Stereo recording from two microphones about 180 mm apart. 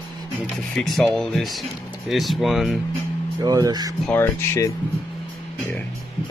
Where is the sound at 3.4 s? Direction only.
20° right (ahead or behind).